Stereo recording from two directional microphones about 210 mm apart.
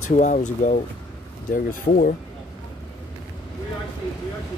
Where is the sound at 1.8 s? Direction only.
40° left (ahead or behind).